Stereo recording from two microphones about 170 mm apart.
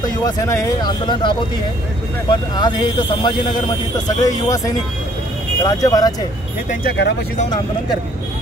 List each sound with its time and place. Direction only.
0.2 s speech: 20° left (ahead or behind)
6.8 s speech: 80° left